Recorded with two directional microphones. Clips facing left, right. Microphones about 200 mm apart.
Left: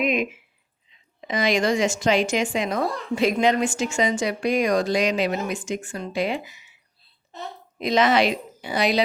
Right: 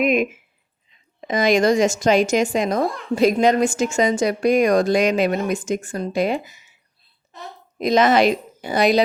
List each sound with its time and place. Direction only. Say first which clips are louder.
0.0 s a woman's voice: right 5 dB; 50° right (ahead or behind)
7.8 s a woman's voice: right 4 dB; 45° right (ahead or behind)